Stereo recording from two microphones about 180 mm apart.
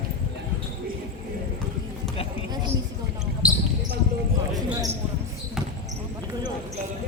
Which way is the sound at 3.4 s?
5° right (ahead or behind).